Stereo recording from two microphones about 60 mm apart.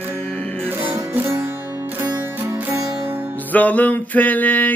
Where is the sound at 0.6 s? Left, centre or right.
Right.